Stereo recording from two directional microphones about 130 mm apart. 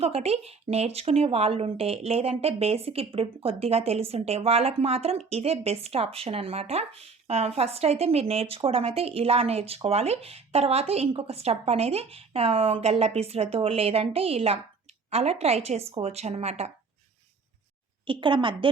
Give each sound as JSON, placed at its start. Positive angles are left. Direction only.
{"t": 0.0, "sound": "speech", "side_deg": -50}
{"t": 18.0, "sound": "a woman's voice", "side_deg": -40}